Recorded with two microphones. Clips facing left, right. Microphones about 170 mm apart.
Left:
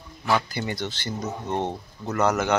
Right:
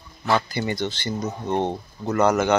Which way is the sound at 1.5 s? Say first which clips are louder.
Right 4 dB; 25° right (ahead or behind).